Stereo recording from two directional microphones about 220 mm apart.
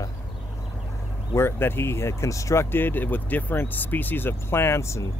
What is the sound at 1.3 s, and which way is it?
Speech, 10° left (ahead or behind).